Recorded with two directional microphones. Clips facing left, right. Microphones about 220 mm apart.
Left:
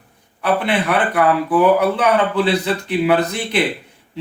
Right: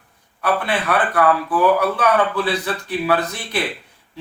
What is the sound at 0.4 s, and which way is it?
Speech, 25° left (ahead or behind).